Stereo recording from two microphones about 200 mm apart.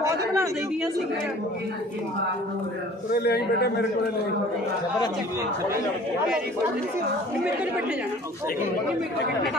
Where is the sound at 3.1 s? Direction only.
55° left (ahead or behind).